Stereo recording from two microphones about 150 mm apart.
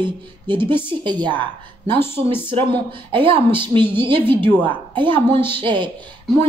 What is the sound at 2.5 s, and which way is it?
A woman's voice, 35° right (ahead or behind).